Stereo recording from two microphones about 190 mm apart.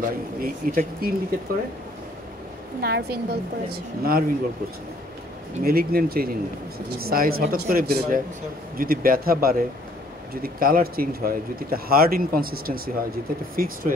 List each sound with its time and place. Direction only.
0.0 s speech: 50° right (ahead or behind)
2.8 s a man's voice: 55° right (ahead or behind)
5.6 s a man's voice: 50° right (ahead or behind)